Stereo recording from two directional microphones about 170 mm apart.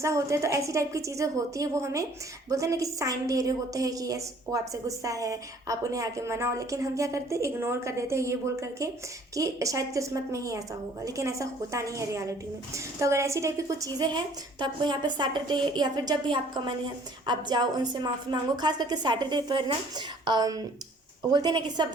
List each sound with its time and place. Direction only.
0.0 s a woman's voice: 15° right (ahead or behind)